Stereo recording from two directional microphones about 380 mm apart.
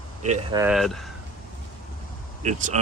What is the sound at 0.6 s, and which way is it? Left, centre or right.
Speech, centre.